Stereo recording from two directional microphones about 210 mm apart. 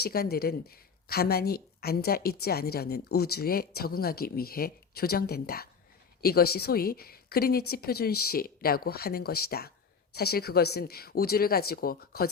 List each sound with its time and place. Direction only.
0.0 s a woman's voice: 45° left (ahead or behind)